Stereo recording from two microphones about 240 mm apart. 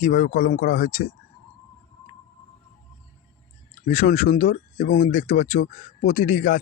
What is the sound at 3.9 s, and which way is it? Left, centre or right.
Speech, left.